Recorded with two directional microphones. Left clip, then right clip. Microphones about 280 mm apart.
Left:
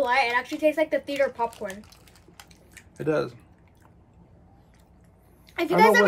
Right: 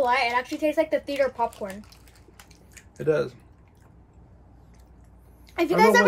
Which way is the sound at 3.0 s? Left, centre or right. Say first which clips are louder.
Right 2 dB; centre.